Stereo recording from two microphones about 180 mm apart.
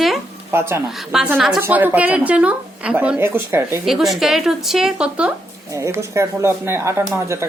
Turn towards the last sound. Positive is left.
turn(degrees=-15)  # may be behind; listen again after turning